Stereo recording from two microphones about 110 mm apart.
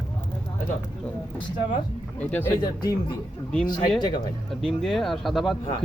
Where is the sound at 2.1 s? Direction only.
15° left (ahead or behind).